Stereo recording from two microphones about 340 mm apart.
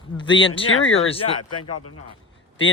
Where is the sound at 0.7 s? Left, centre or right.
Left.